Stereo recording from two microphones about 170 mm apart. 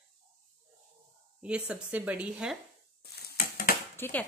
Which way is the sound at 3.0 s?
60° left (ahead or behind).